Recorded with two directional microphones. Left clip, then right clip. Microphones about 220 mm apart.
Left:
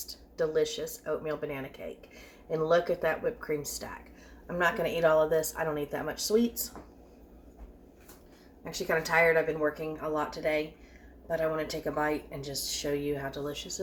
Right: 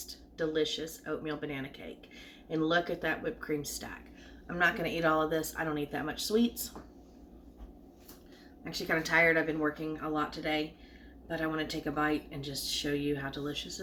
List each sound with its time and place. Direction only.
0.1 s speech: centre (ahead or behind)
9.1 s speech: 5° left (ahead or behind)